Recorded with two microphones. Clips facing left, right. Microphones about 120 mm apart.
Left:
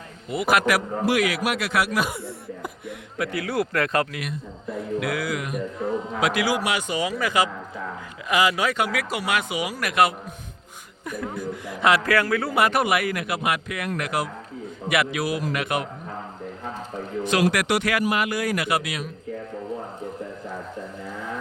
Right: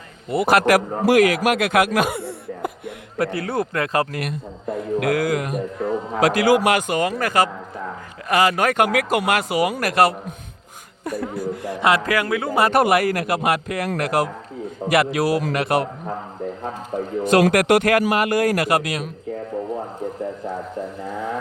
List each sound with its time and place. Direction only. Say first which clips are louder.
0.3 s a man's voice: right 5 dB; 35° right (ahead or behind); by 2.9 s 65° right (ahead or behind)
3.2 s speech: right 3 dB; 30° right (ahead or behind)
4.1 s a man's voice: right 5 dB; 55° right (ahead or behind); by 11.7 s 35° right (ahead or behind)
11.8 s speech: right 1 dB; 20° right (ahead or behind)
12.5 s a man's voice: right 8 dB; 35° right (ahead or behind)
17.5 s a man's voice: right 7 dB; 50° right (ahead or behind)